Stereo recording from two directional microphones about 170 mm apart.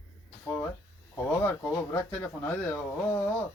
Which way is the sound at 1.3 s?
10° left (ahead or behind).